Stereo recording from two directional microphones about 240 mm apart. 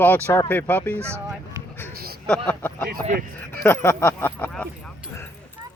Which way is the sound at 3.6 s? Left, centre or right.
Centre.